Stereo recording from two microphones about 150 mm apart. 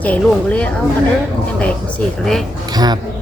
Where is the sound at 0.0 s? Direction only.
10° left (ahead or behind).